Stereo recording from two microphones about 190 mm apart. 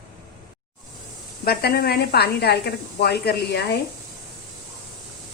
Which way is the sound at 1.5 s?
55° left (ahead or behind).